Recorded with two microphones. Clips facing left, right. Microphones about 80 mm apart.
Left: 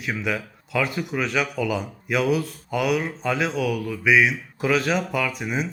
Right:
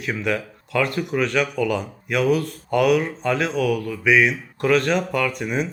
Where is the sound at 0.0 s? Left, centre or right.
Centre.